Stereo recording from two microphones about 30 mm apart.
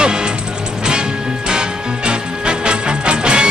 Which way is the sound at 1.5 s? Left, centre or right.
Right.